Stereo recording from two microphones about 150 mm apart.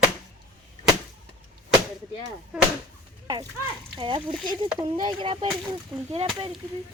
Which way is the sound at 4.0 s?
35° right (ahead or behind).